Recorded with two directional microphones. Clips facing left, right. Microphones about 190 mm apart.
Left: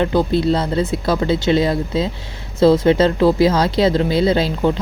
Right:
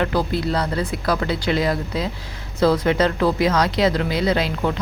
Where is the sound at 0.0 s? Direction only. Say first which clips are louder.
Left 5 dB; 25° left (ahead or behind).